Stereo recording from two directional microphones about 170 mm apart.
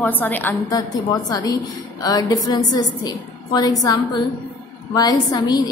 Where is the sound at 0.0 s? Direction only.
10° left (ahead or behind).